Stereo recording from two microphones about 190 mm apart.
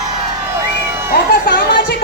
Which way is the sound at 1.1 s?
55° left (ahead or behind).